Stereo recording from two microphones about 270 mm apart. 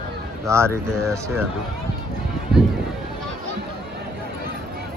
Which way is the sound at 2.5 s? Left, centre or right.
Centre.